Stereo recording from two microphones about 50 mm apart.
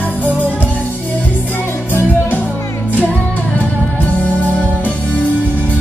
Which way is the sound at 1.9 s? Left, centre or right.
Left.